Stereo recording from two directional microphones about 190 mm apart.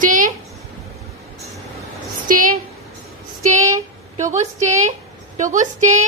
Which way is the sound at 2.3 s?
45° right (ahead or behind).